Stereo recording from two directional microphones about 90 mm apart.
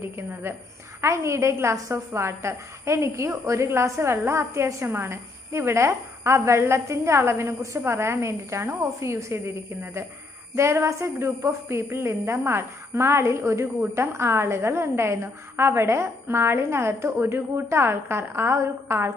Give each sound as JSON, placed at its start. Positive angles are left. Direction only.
{"t": 0.0, "sound": "a woman's voice", "side_deg": -25}
{"t": 10.5, "sound": "a woman's voice", "side_deg": -30}